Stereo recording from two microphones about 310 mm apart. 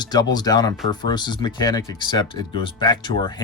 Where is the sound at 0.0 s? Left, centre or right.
Centre.